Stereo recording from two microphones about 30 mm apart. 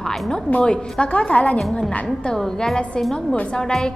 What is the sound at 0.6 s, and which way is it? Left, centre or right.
Speech, left.